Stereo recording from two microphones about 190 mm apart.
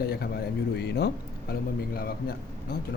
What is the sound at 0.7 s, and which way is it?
Speech, 60° left (ahead or behind).